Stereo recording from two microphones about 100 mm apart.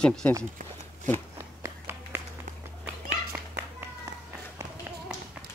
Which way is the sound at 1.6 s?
25° right (ahead or behind).